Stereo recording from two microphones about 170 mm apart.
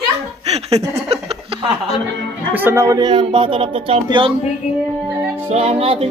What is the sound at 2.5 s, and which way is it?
Speech, 15° right (ahead or behind).